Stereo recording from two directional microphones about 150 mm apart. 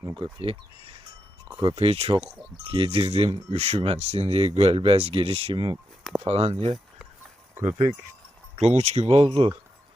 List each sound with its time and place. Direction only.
0.2 s speech: 35° right (ahead or behind)
8.5 s speech: 45° right (ahead or behind)